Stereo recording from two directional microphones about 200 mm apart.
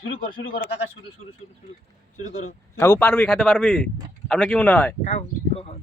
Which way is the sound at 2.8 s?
10° left (ahead or behind).